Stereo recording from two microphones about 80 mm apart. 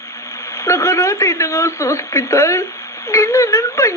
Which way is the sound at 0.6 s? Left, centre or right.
Left.